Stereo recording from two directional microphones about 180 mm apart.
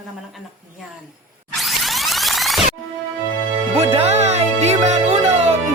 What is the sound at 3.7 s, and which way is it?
Music, 35° right (ahead or behind).